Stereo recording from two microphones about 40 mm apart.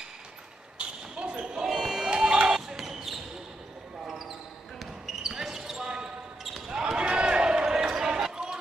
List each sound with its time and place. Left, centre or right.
0.7 s basketball bounce: right
1.7 s a sound: centre
2.2 s basketball bounce: centre